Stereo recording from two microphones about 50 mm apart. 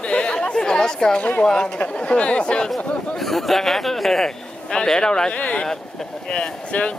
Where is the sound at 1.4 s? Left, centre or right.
Centre.